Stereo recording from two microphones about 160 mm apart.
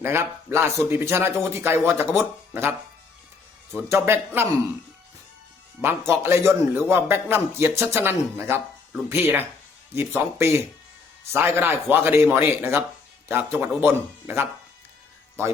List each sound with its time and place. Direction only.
0.0 s speech: 15° right (ahead or behind)
3.8 s speech: 15° right (ahead or behind)
6.1 s speech: 15° right (ahead or behind)